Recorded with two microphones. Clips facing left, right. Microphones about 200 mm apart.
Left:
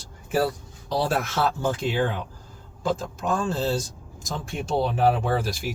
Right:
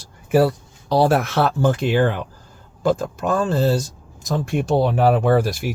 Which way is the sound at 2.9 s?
65° right (ahead or behind).